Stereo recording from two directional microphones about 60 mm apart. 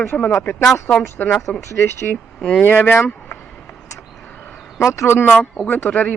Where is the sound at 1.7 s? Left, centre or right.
Left.